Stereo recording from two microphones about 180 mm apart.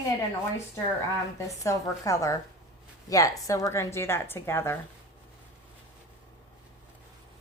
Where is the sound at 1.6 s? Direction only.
20° left (ahead or behind).